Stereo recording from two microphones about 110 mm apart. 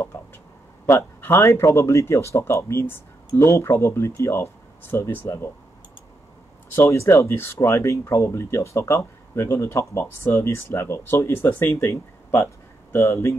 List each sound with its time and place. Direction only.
0.8 s speech: 25° left (ahead or behind)
6.7 s speech: 25° left (ahead or behind)